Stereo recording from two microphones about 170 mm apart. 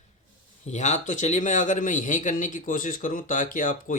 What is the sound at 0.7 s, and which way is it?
Speech, 45° left (ahead or behind).